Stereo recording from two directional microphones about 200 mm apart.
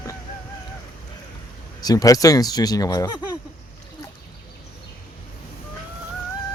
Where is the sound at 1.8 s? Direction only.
20° left (ahead or behind).